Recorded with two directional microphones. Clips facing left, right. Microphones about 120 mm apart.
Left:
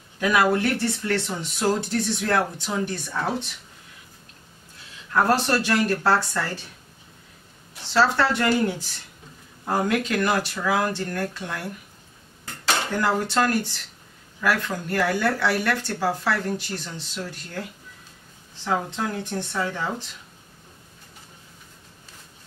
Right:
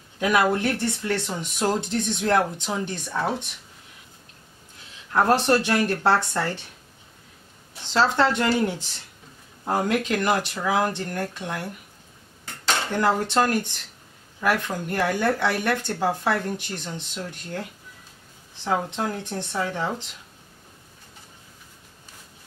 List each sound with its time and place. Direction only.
0.2 s speech: 20° right (ahead or behind)
5.1 s speech: 20° right (ahead or behind)
7.9 s speech: 20° right (ahead or behind)
12.6 s speech: 20° right (ahead or behind)